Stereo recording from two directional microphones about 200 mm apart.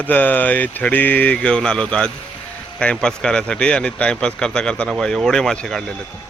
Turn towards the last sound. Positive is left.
turn(degrees=0)  # may be behind; listen again after turning